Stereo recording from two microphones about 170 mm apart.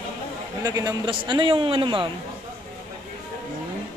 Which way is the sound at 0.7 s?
20° right (ahead or behind).